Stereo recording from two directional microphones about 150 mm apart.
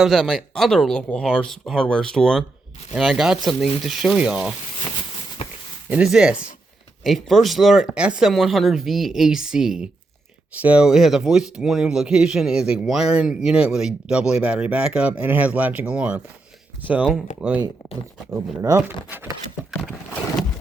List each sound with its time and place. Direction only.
0.0 s speech: centre (ahead or behind)
5.9 s speech: 5° right (ahead or behind)
17.3 s speech: 55° left (ahead or behind)
18.3 s speech: 20° right (ahead or behind)